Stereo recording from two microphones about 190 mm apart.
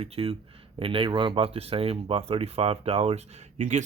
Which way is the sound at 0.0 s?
30° right (ahead or behind).